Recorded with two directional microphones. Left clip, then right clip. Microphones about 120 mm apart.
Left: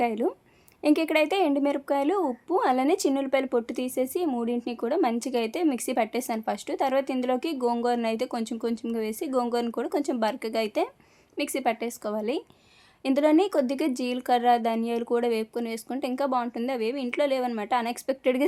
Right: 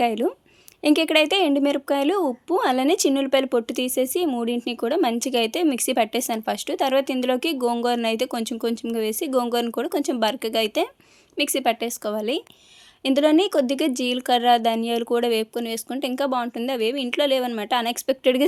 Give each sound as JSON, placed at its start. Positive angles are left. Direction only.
{"t": 0.0, "sound": "speech", "side_deg": -25}